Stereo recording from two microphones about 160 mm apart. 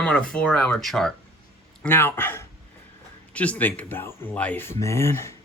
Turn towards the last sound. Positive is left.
turn(degrees=15)  # may be behind; listen again after turning